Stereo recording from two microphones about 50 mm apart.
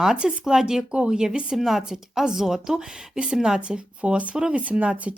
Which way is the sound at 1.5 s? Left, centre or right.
Centre.